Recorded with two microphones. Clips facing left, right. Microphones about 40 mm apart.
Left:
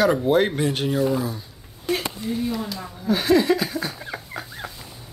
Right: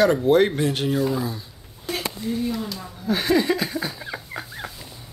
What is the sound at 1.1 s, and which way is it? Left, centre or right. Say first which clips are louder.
Speech: left 1 dB; left.